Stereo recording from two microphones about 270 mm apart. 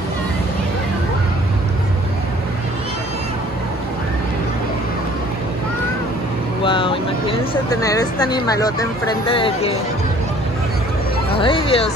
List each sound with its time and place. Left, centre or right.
6.6 s a sound: centre
9.3 s speech: left
11.3 s speech: centre